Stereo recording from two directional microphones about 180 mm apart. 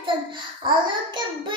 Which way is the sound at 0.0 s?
25° right (ahead or behind).